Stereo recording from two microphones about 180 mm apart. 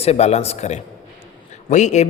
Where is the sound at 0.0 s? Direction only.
35° left (ahead or behind).